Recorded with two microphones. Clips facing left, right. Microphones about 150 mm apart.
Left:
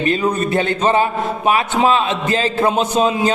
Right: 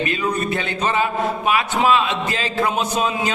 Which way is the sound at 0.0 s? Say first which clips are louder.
Left 4 dB; 35° left (ahead or behind).